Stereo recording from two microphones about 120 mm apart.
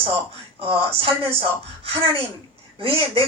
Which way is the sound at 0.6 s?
50° right (ahead or behind).